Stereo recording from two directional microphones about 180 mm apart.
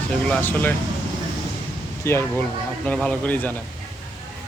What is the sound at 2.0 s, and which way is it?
Speech, 10° left (ahead or behind).